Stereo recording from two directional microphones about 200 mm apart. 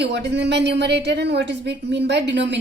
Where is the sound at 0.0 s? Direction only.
60° right (ahead or behind).